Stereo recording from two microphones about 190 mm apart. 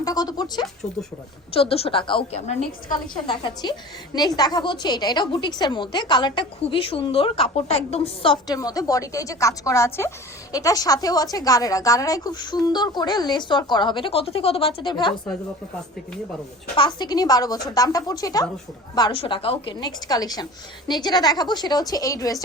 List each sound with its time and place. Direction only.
0.0 s a woman's voice: 20° left (ahead or behind)
16.7 s a woman's voice: 25° left (ahead or behind)